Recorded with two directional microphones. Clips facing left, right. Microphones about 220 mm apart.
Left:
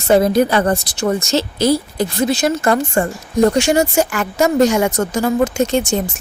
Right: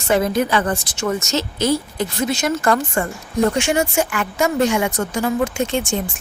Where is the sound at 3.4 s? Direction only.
40° left (ahead or behind).